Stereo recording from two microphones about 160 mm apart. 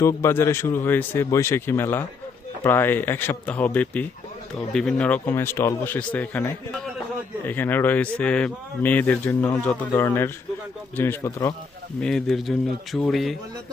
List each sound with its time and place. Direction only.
0.0 s speech: 15° left (ahead or behind)
11.9 s speech: 5° left (ahead or behind)